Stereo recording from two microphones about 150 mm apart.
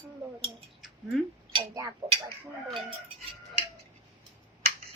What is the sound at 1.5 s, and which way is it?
Speech, 20° right (ahead or behind).